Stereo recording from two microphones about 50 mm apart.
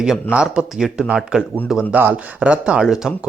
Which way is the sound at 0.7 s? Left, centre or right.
Centre.